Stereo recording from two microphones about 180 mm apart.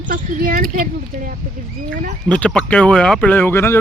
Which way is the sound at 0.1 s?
50° right (ahead or behind).